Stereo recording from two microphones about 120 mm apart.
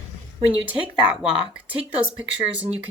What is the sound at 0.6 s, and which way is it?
Speech, 5° right (ahead or behind).